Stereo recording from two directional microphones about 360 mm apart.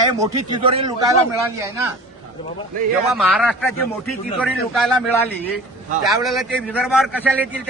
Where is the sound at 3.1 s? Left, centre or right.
Centre.